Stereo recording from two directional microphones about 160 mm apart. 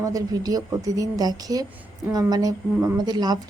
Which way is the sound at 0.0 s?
20° right (ahead or behind).